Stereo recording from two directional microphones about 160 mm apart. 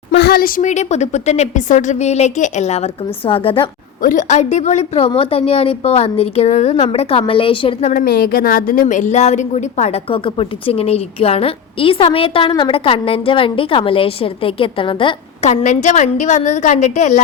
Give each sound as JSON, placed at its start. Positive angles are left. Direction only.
{"t": 0.1, "sound": "speech", "side_deg": 85}
{"t": 4.0, "sound": "a woman's voice", "side_deg": 50}
{"t": 7.9, "sound": "a woman's voice", "side_deg": 75}